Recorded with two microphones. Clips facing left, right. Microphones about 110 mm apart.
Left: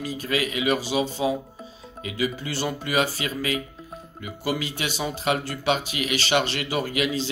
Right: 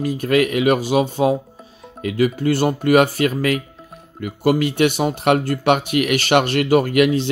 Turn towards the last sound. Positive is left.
turn(degrees=-55)  # may be behind; listen again after turning